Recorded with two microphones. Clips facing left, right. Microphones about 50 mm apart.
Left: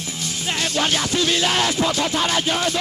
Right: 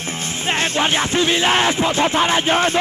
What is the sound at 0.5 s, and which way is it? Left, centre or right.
Music, right.